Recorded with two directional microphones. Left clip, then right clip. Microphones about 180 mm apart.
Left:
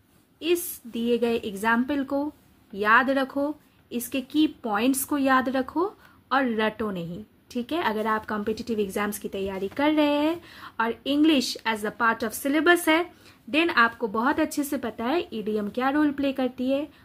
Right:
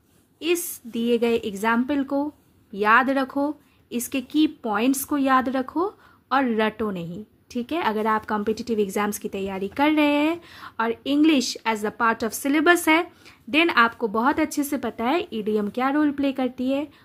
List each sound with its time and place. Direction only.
0.4 s speech: 30° right (ahead or behind)